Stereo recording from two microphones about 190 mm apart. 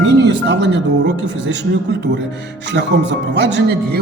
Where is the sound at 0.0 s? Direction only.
65° right (ahead or behind).